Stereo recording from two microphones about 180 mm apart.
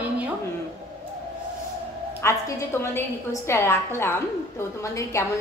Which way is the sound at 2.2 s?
15° left (ahead or behind).